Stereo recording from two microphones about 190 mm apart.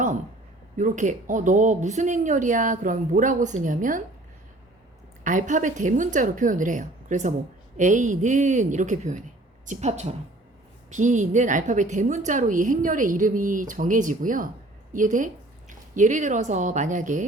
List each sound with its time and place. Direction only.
0.8 s a woman's voice: 40° right (ahead or behind)
5.2 s a woman's voice: 40° right (ahead or behind)